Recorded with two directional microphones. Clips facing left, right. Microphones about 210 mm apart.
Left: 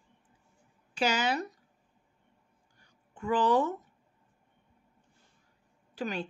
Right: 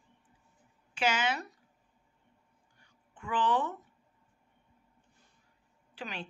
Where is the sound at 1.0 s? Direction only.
35° left (ahead or behind).